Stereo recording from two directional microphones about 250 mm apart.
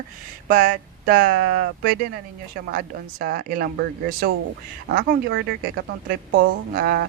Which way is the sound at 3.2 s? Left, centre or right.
Right.